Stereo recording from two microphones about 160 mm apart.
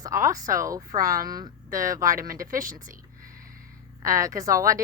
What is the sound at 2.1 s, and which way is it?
Speech, 60° right (ahead or behind).